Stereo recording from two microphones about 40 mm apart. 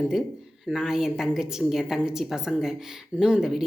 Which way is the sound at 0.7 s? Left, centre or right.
Centre.